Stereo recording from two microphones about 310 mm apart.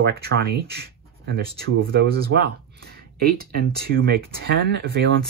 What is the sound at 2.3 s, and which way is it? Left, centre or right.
Speech, right.